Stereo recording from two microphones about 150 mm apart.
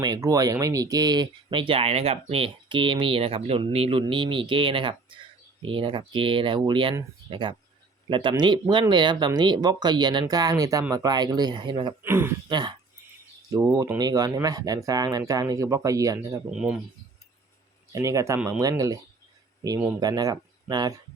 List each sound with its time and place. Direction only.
0.0 s speech: 25° right (ahead or behind)
12.0 s speech: 15° right (ahead or behind)
12.5 s speech: 30° right (ahead or behind)
16.5 s speech: 5° right (ahead or behind)
17.9 s speech: 20° right (ahead or behind)
20.0 s speech: 25° right (ahead or behind)